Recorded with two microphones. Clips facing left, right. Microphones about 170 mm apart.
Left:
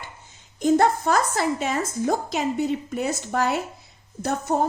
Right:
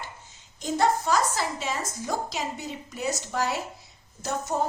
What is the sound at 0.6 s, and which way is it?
A woman's voice, 55° left (ahead or behind).